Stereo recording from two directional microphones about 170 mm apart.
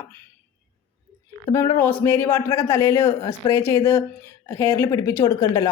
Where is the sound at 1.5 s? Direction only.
20° left (ahead or behind).